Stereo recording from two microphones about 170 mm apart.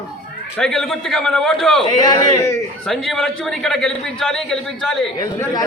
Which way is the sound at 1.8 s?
20° left (ahead or behind).